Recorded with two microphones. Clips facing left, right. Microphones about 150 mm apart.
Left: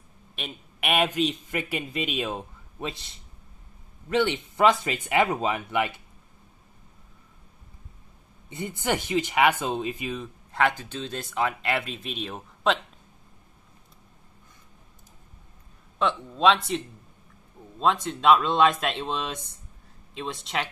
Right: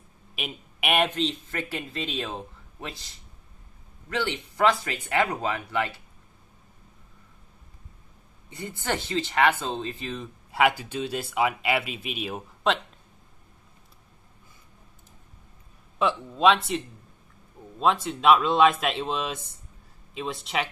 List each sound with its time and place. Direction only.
0.4 s a man's voice: centre (ahead or behind)
1.0 s speech: 10° left (ahead or behind)
4.1 s speech: 25° left (ahead or behind)
8.5 s speech: 20° left (ahead or behind)
10.1 s speech: 5° right (ahead or behind)
16.0 s speech: 5° right (ahead or behind)